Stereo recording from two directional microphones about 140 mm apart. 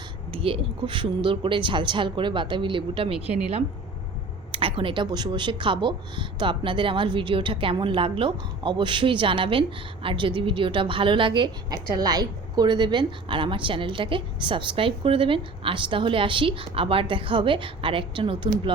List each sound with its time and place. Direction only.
0.3 s speech: 40° right (ahead or behind)
4.5 s speech: 40° right (ahead or behind)